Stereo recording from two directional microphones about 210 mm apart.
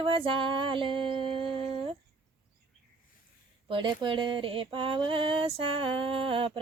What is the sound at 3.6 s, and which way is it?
Speech, 25° right (ahead or behind).